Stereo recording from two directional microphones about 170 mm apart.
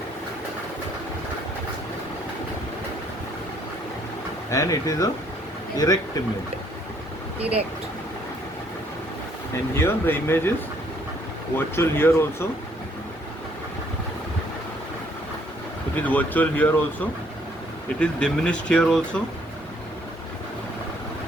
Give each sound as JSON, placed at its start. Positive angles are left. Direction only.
{"t": 4.5, "sound": "speech", "side_deg": 20}
{"t": 9.7, "sound": "speech", "side_deg": 15}
{"t": 11.5, "sound": "speech", "side_deg": 15}
{"t": 16.0, "sound": "speech", "side_deg": 10}